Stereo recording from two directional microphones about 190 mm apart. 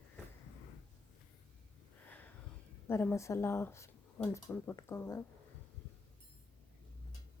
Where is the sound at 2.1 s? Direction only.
10° left (ahead or behind).